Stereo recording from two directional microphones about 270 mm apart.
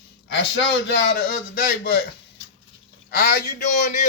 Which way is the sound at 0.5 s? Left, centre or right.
Left.